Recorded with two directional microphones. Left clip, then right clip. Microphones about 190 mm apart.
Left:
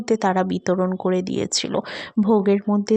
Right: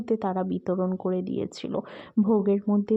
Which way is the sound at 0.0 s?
20° left (ahead or behind).